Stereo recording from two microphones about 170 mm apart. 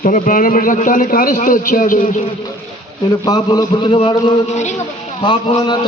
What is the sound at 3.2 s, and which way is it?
A man's voice, 20° left (ahead or behind).